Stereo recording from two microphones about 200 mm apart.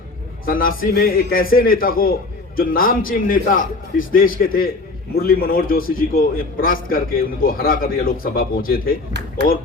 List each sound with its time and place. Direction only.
0.4 s a man's voice: 45° left (ahead or behind)